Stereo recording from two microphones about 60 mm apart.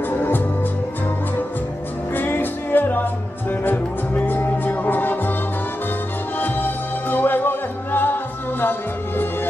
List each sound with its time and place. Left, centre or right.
2.1 s music: left
6.4 s music: left